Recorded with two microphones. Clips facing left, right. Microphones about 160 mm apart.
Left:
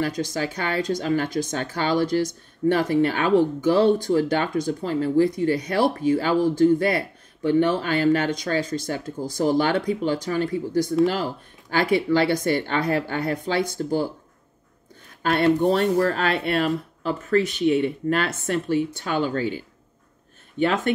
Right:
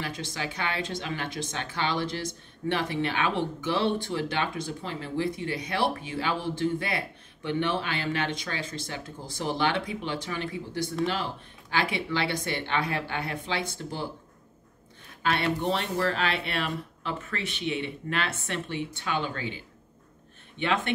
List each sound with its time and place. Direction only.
0.0 s speech: 40° left (ahead or behind)
15.2 s speech: 45° left (ahead or behind)